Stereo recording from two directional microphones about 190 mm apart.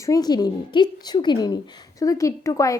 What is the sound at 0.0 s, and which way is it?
A woman's voice, 20° left (ahead or behind).